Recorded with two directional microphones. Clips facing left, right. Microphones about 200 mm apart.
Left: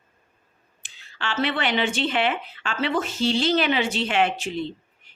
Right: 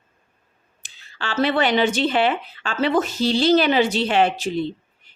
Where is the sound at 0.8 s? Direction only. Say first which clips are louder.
Right 1 dB; 40° right (ahead or behind).